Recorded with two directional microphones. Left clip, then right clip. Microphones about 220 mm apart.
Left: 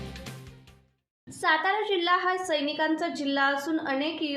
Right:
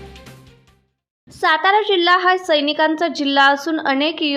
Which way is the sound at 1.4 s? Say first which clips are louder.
Right 10 dB; 45° right (ahead or behind).